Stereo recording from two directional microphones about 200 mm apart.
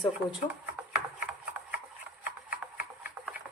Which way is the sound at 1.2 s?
5° right (ahead or behind).